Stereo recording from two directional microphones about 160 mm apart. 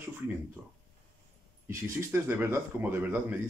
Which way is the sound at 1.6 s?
15° right (ahead or behind).